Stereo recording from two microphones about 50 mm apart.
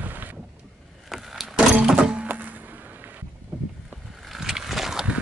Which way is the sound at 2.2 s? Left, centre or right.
Right.